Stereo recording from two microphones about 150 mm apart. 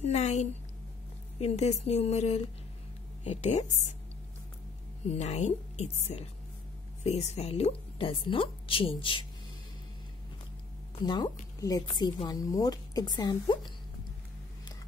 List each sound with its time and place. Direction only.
0.0 s a woman's voice: 45° left (ahead or behind)
5.0 s a woman's voice: 45° left (ahead or behind)
11.1 s speech: 30° left (ahead or behind)